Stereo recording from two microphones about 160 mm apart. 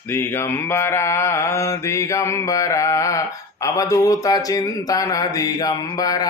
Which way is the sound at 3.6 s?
20° left (ahead or behind).